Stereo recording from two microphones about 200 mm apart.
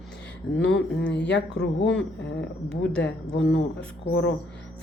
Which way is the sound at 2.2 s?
60° left (ahead or behind).